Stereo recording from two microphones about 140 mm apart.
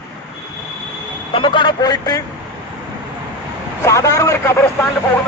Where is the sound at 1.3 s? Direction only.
35° left (ahead or behind).